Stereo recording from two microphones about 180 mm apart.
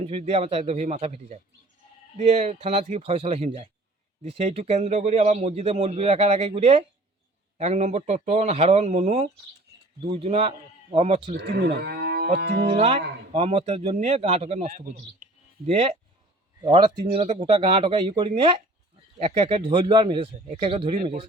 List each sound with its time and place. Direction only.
0.1 s speech: 35° right (ahead or behind)
11.3 s cattle: 70° right (ahead or behind)
12.4 s music: 70° right (ahead or behind)
12.8 s speech: 35° right (ahead or behind)